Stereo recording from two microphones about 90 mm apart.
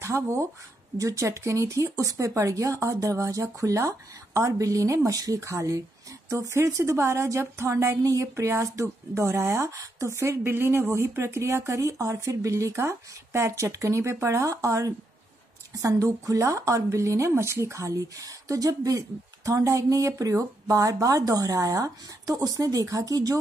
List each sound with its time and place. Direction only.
0.0 s a woman's voice: 30° right (ahead or behind)